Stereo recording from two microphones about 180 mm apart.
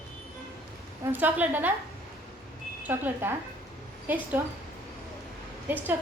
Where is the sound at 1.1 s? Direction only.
10° right (ahead or behind).